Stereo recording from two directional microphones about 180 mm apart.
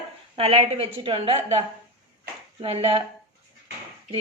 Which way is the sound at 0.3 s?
35° right (ahead or behind).